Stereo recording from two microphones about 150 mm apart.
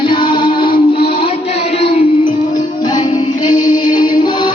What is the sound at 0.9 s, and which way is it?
Music, 90° left.